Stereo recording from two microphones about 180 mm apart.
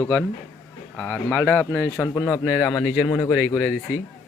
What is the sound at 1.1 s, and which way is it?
A man's voice, 10° left (ahead or behind).